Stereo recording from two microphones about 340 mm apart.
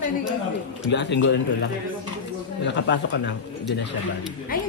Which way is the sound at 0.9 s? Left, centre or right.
Left.